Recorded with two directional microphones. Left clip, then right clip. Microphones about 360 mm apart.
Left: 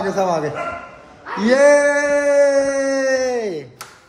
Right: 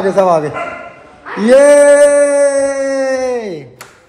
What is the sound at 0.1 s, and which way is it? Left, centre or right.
Speech, centre.